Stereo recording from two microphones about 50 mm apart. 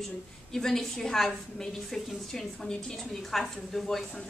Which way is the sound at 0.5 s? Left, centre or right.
Centre.